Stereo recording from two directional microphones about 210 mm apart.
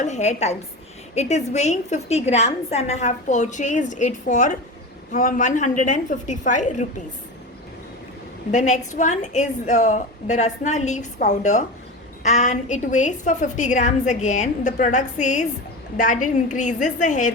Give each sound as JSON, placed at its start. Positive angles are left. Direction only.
{"t": 0.0, "sound": "a woman's voice", "side_deg": 35}
{"t": 8.5, "sound": "a woman's voice", "side_deg": 35}